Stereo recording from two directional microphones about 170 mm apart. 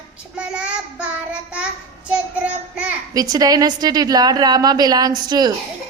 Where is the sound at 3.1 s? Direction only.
20° right (ahead or behind).